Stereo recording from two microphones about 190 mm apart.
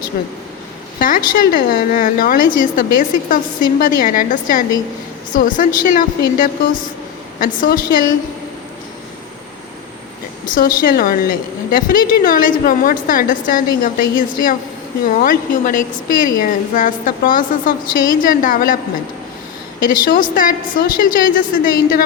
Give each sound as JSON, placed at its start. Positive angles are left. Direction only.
{"t": 0.1, "sound": "a woman's voice", "side_deg": 50}
{"t": 10.4, "sound": "a woman's voice", "side_deg": 45}
{"t": 19.9, "sound": "a woman's voice", "side_deg": 45}